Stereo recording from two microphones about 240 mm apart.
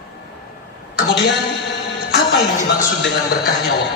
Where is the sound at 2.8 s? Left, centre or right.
Left.